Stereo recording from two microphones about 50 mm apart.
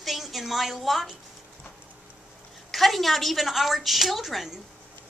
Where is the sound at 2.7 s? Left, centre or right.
Centre.